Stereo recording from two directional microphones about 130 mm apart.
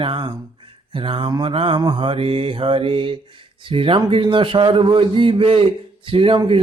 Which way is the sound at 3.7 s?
45° right (ahead or behind).